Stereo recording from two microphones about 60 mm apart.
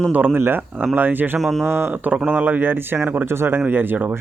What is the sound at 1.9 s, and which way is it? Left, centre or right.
Speech, right.